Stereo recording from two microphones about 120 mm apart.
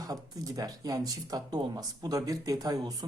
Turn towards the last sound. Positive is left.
turn(degrees=-30)  # may be behind; listen again after turning